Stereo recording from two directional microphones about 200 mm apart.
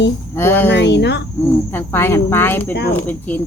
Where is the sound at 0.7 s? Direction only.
60° left (ahead or behind).